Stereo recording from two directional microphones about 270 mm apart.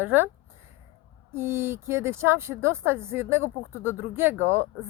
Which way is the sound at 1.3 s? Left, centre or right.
Centre.